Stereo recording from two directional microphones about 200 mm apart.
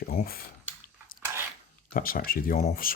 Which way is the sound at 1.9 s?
45° left (ahead or behind).